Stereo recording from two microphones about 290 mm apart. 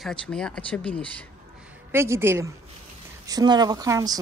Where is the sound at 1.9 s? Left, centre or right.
Centre.